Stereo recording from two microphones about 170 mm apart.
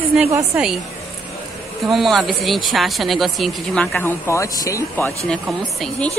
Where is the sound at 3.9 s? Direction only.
15° left (ahead or behind).